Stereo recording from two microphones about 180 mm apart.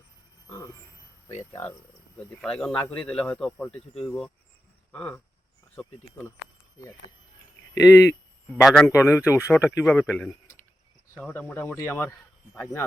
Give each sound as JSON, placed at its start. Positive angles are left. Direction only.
{"t": 0.4, "sound": "a sound", "side_deg": 15}
{"t": 2.1, "sound": "speech", "side_deg": 5}
{"t": 7.8, "sound": "speech", "side_deg": 15}
{"t": 8.6, "sound": "speech", "side_deg": 5}
{"t": 8.9, "sound": "speech", "side_deg": 15}